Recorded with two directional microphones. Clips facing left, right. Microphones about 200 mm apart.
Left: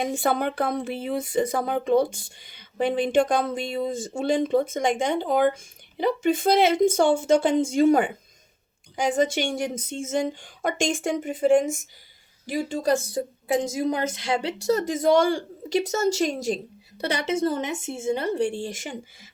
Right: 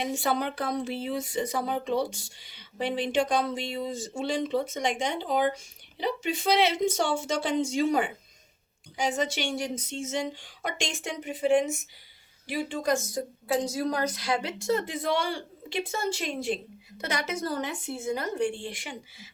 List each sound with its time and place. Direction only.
0.0 s a woman's voice: 50° left (ahead or behind); by 13.2 s 35° left (ahead or behind)
13.5 s a woman's voice: 20° left (ahead or behind); by 16.6 s 40° left (ahead or behind)
17.0 s a woman's voice: 30° left (ahead or behind)